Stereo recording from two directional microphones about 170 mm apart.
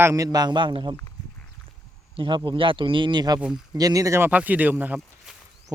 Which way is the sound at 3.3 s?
5° right (ahead or behind).